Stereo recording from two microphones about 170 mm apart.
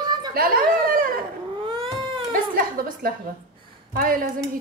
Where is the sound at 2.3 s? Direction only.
55° right (ahead or behind).